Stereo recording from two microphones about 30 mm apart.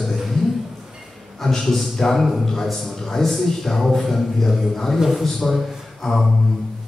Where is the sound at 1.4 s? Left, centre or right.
Centre.